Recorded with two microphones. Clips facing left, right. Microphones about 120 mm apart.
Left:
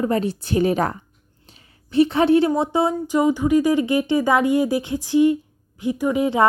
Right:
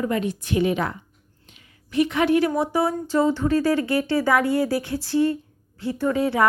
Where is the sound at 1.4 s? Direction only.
35° left (ahead or behind); by 6.5 s 20° left (ahead or behind).